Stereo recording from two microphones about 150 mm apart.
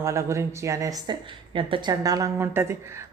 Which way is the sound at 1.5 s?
35° right (ahead or behind).